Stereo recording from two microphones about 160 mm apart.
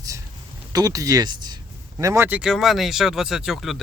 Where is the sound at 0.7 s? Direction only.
25° right (ahead or behind).